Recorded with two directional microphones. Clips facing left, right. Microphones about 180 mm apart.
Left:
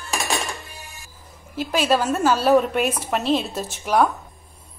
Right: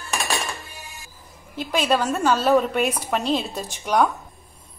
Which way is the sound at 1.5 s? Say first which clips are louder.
Left 1 dB; 5° left (ahead or behind).